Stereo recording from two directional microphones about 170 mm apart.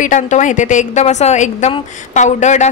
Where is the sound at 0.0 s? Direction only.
45° left (ahead or behind).